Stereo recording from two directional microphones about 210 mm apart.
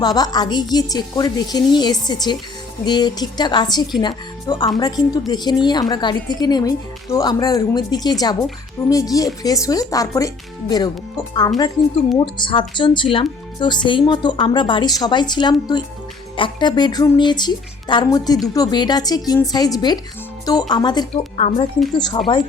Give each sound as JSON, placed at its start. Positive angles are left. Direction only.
{"t": 0.0, "sound": "a woman's voice", "side_deg": 20}